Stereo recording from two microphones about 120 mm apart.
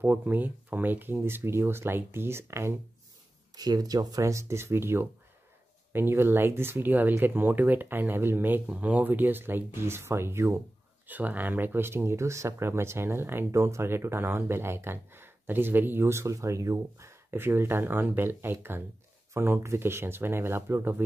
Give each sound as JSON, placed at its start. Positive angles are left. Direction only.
{"t": 0.0, "sound": "speech", "side_deg": -15}
{"t": 3.5, "sound": "speech", "side_deg": -35}